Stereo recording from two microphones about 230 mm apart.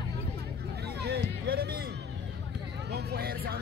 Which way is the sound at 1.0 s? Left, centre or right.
Right.